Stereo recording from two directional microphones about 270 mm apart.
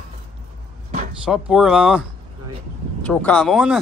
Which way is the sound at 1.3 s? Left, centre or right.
Centre.